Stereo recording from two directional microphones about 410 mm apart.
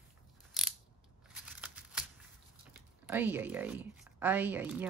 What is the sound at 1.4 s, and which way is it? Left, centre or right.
Crumpling, centre.